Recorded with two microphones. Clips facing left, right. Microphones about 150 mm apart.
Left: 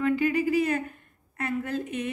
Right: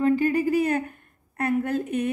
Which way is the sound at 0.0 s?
45° right (ahead or behind).